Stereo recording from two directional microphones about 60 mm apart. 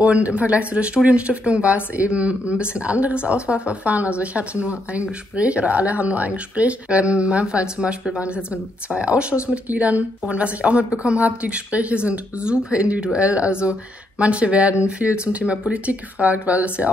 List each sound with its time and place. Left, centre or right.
0.0 s speech: right
8.9 s speech: centre